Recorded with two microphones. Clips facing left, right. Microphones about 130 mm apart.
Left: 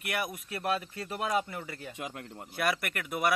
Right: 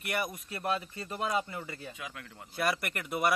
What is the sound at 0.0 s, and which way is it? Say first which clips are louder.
Speech: even; centre (ahead or behind).